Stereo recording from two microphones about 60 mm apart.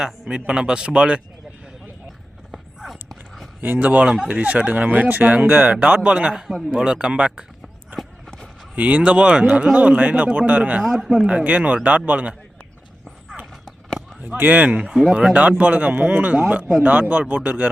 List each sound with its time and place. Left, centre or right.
0.0 s a man's voice: centre
2.5 s a sound: centre
3.6 s speech: right
4.0 s speech: centre
6.5 s a man's voice: centre
8.7 s speech: right
10.8 s a man's voice: centre
11.3 s speech: right
14.2 s speech: right
14.7 s a man's voice: centre